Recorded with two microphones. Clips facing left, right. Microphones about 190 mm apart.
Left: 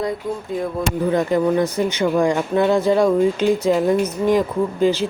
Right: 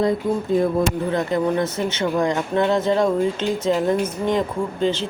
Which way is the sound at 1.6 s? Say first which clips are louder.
Left 3 dB; 25° right (ahead or behind).